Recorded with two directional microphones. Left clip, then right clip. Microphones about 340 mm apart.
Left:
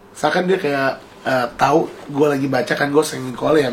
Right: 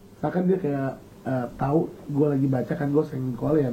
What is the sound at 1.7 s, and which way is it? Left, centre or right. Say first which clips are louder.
Speech: left 8 dB; left.